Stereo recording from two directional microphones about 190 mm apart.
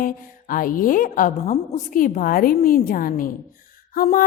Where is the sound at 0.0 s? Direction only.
45° left (ahead or behind).